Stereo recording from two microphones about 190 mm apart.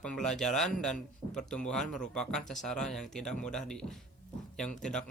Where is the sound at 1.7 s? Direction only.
5° left (ahead or behind).